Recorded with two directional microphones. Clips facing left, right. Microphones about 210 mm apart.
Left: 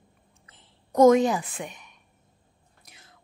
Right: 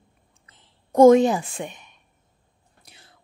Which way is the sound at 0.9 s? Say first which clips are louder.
Right 4 dB; 30° right (ahead or behind).